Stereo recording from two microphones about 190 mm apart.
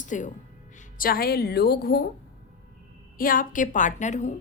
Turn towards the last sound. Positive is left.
turn(degrees=40)  # may be behind; listen again after turning